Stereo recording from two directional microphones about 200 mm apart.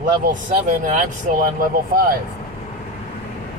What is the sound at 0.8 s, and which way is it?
Speech, 40° right (ahead or behind).